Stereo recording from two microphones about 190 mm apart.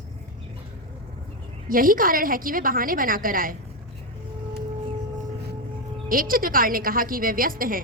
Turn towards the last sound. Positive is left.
turn(degrees=-45)  # may be behind; listen again after turning